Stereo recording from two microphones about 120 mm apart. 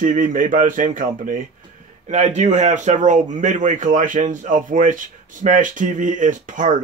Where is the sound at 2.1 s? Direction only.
75° right (ahead or behind); by 6.7 s 90° right.